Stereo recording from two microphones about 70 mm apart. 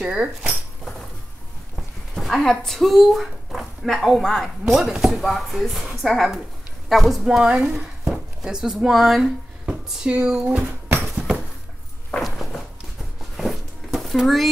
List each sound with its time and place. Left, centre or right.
0.0 s speech: centre
2.1 s a woman's voice: centre
11.1 s a sound: centre
13.4 s cupboard open or close: centre